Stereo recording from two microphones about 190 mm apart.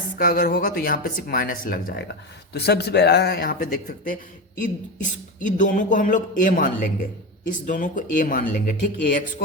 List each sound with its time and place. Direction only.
0.2 s speech: 50° left (ahead or behind)